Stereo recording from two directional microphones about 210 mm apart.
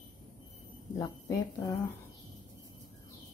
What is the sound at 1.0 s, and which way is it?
Speech, 15° left (ahead or behind).